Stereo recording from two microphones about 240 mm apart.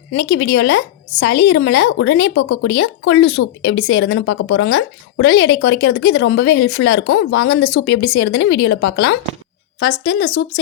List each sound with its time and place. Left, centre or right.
0.1 s a woman's voice: left